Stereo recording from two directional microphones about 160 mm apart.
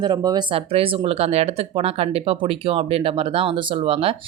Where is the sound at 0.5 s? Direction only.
35° right (ahead or behind).